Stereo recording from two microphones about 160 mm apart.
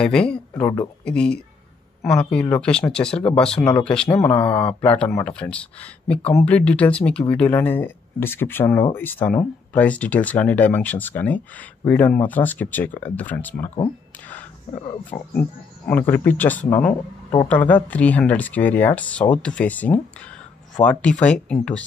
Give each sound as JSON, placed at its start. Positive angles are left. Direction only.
{"t": 0.0, "sound": "speech", "side_deg": 5}
{"t": 0.6, "sound": "speech", "side_deg": 25}
{"t": 1.0, "sound": "speech", "side_deg": 5}
{"t": 15.3, "sound": "speech", "side_deg": 10}